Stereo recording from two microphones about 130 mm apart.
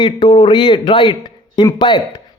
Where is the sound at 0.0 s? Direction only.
40° left (ahead or behind).